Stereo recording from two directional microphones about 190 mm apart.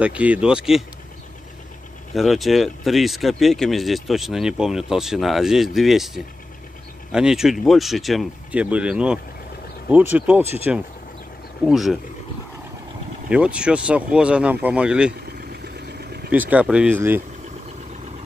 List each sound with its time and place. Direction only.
0.0 s speech: 5° right (ahead or behind)
2.1 s speech: centre (ahead or behind)
11.6 s speech: centre (ahead or behind)
13.3 s speech: 5° right (ahead or behind)
15.5 s vehicle: 60° right (ahead or behind)
16.3 s speech: 10° right (ahead or behind)